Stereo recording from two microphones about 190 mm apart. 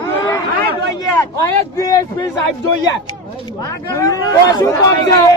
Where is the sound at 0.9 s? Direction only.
20° left (ahead or behind).